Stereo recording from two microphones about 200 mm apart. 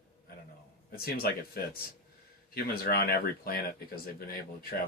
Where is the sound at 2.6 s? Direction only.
50° left (ahead or behind).